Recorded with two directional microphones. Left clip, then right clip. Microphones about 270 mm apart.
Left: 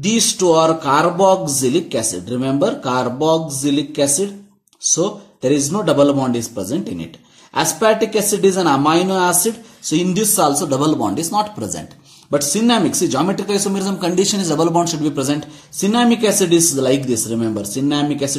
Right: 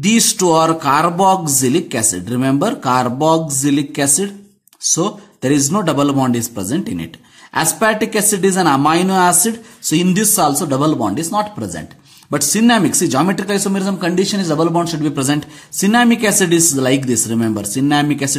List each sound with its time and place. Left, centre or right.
0.4 s speech: right